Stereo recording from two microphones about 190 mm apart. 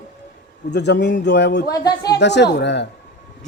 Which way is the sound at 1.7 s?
20° left (ahead or behind).